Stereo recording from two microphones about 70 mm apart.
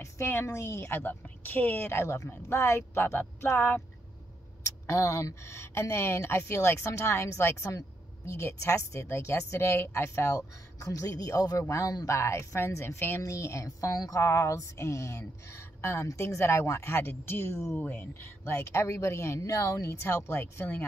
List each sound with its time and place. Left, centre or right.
0.0 s a woman's voice: left
4.6 s a woman's voice: left
12.1 s a woman's voice: left
13.2 s a woman's voice: left
13.7 s a woman's voice: left
14.2 s a woman's voice: left
19.9 s a woman's voice: left